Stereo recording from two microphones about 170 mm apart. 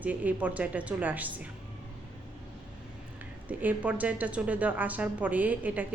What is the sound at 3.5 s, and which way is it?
A woman's voice, 10° right (ahead or behind).